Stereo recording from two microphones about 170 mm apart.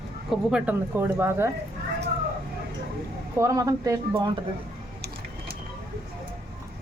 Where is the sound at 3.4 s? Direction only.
20° right (ahead or behind).